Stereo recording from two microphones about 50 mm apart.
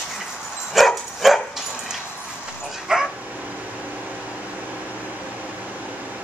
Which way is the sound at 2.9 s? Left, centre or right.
Centre.